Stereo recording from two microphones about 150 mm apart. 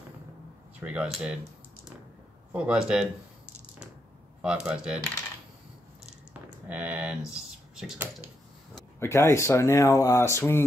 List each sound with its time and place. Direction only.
0.7 s speech: 10° right (ahead or behind)
2.5 s speech: 5° right (ahead or behind)
4.4 s speech: 5° right (ahead or behind)
6.7 s speech: 10° right (ahead or behind)
9.0 s speech: 20° left (ahead or behind)